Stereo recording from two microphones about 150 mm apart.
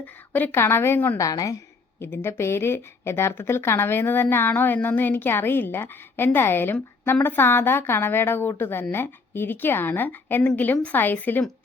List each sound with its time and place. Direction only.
0.0 s speech: 10° left (ahead or behind)